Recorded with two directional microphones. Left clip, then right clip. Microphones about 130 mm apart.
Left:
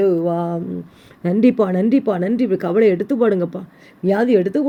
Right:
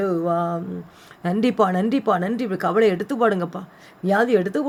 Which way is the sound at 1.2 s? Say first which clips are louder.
Left 3 dB; 20° left (ahead or behind).